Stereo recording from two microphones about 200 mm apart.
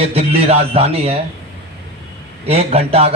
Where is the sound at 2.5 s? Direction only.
30° right (ahead or behind).